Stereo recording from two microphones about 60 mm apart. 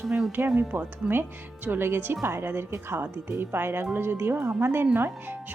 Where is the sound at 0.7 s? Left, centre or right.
Right.